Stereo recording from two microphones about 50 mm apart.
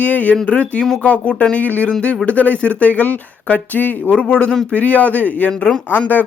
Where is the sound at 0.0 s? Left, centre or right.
Left.